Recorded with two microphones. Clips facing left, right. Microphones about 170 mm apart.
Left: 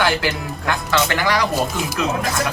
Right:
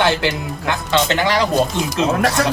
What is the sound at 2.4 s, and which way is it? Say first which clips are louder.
Speech: right 5 dB; 70° right (ahead or behind).